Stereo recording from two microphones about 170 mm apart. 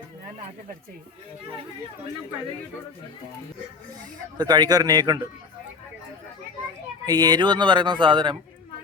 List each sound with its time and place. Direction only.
4.4 s speech: 25° right (ahead or behind)
7.0 s speech: 25° right (ahead or behind)